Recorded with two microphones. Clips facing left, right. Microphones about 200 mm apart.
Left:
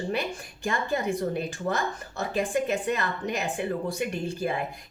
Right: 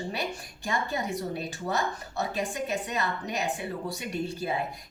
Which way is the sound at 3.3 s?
50° left (ahead or behind).